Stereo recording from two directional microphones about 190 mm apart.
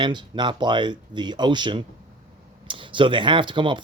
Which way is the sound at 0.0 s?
25° right (ahead or behind).